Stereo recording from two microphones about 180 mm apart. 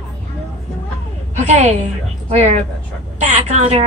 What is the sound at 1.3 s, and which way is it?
A woman's voice, 40° right (ahead or behind).